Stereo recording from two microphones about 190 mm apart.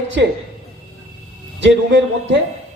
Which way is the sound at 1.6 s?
70° right (ahead or behind).